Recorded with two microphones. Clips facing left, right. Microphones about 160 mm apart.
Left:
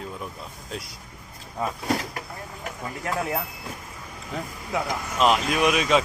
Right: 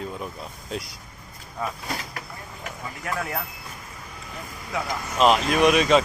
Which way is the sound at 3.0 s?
25° left (ahead or behind).